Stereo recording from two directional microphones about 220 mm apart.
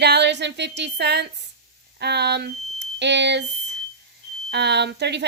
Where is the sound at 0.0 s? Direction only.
50° right (ahead or behind).